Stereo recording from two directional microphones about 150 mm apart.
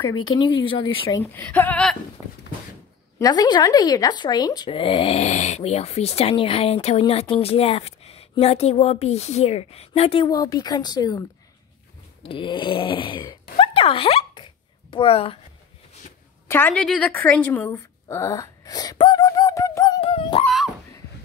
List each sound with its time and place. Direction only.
0.0 s speech: 30° left (ahead or behind)
1.2 s a woman's voice: 10° left (ahead or behind)
3.2 s speech: 25° left (ahead or behind)
12.2 s snoring: 35° left (ahead or behind)
16.4 s a woman's voice: 15° left (ahead or behind)
20.0 s a sound: 40° left (ahead or behind)
20.4 s speech: centre (ahead or behind)